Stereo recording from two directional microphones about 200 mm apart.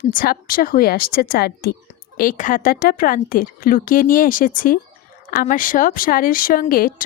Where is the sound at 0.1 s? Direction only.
45° left (ahead or behind).